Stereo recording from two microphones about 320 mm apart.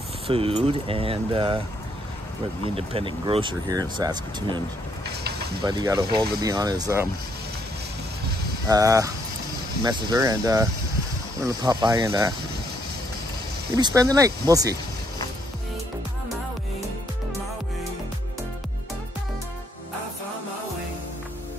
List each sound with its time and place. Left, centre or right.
0.3 s speech: centre
2.7 s speech: centre
8.6 s speech: centre
13.7 s speech: centre